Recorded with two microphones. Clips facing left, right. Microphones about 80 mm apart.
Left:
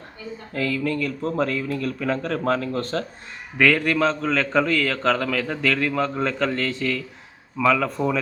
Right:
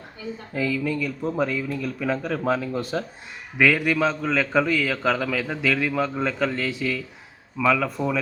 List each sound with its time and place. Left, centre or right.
0.5 s a man's voice: centre